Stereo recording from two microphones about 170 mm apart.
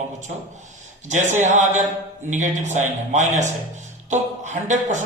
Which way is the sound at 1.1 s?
45° right (ahead or behind).